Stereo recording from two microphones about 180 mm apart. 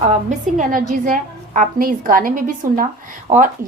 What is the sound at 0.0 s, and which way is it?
A woman's voice, 40° right (ahead or behind).